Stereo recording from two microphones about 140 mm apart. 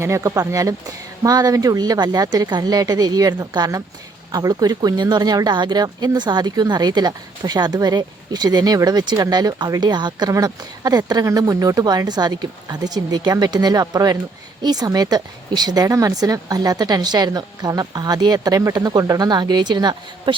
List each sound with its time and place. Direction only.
0.0 s speech: 20° right (ahead or behind)